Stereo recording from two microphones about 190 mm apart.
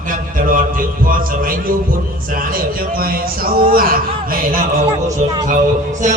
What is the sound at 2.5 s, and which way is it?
Speech, 50° right (ahead or behind).